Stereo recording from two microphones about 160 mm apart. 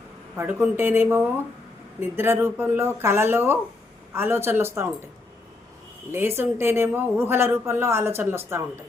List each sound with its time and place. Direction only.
0.3 s speech: 15° right (ahead or behind)
6.1 s speech: 15° right (ahead or behind)